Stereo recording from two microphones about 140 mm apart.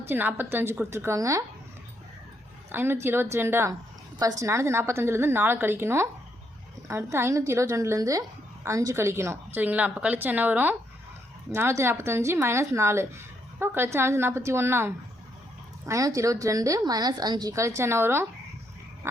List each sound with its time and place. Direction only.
0.1 s speech: 15° right (ahead or behind)
2.7 s a woman's voice: 15° right (ahead or behind)